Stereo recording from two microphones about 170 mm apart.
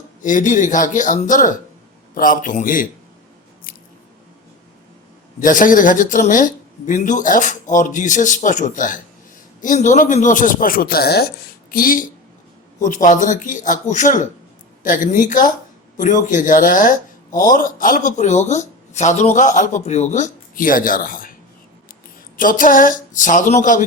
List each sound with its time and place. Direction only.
0.2 s speech: 50° left (ahead or behind)
5.4 s speech: 50° left (ahead or behind); by 11.3 s 70° left (ahead or behind)
11.7 s speech: 55° left (ahead or behind)
22.4 s speech: 55° left (ahead or behind)